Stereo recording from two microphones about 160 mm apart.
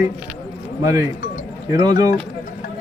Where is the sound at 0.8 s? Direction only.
20° right (ahead or behind).